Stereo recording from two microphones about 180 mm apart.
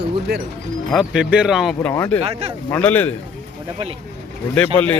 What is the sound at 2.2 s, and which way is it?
Speech, 35° right (ahead or behind).